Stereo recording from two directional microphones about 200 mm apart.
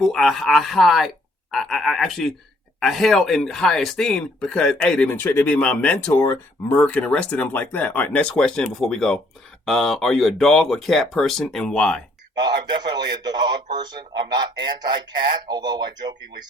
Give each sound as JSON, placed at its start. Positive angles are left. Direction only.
{"t": 0.1, "sound": "speech", "side_deg": 0}
{"t": 12.4, "sound": "a man's voice", "side_deg": -20}